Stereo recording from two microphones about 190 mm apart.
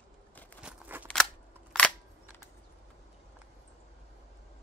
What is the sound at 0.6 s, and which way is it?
Scissors, 5° right (ahead or behind).